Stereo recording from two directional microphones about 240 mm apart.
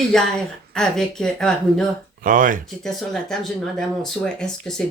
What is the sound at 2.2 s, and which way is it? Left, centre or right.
Speech, right.